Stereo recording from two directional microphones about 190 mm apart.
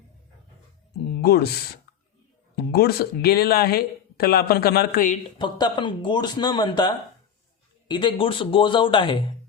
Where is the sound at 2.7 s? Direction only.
55° left (ahead or behind).